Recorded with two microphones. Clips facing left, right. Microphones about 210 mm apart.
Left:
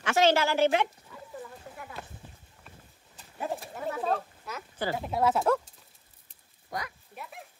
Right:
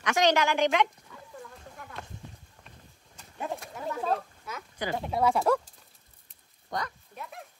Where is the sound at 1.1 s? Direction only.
5° left (ahead or behind).